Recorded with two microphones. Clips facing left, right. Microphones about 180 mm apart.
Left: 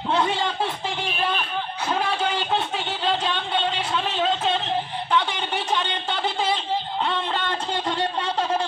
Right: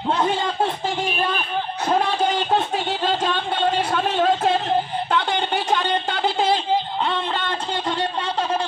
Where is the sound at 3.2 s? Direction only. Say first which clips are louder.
Right 4 dB; 50° right (ahead or behind).